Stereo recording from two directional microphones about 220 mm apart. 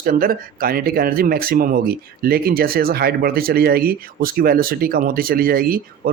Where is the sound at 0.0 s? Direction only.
40° right (ahead or behind).